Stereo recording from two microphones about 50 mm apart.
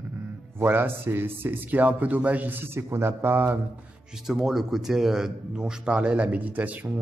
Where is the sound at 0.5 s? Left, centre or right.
Right.